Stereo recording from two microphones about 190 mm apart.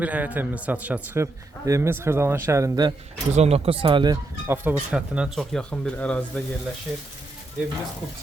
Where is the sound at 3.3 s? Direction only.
35° right (ahead or behind).